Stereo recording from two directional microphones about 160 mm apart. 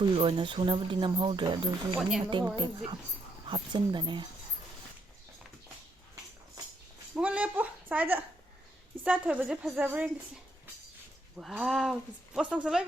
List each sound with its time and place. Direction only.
0.0 s speech: 35° right (ahead or behind)
2.0 s speech: centre (ahead or behind)
2.3 s speech: 30° right (ahead or behind)
7.2 s a sound: 5° right (ahead or behind)
9.0 s a woman's voice: 10° right (ahead or behind)
11.3 s speech: centre (ahead or behind)